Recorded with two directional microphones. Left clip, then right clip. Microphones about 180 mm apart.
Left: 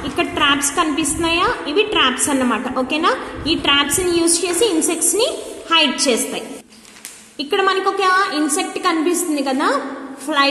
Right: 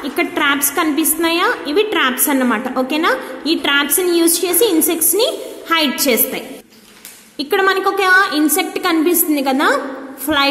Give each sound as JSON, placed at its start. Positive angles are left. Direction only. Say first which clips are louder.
{"t": 0.0, "sound": "a woman's voice", "louder": "right 1 dB", "side_deg": -35}